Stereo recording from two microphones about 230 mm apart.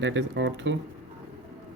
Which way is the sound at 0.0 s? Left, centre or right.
Right.